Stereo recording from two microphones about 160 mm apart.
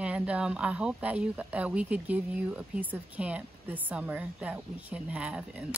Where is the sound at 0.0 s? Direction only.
10° right (ahead or behind).